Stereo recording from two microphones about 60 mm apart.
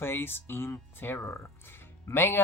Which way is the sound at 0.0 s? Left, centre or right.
Left.